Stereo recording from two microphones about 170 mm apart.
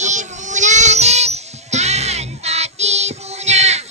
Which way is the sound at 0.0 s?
45° right (ahead or behind).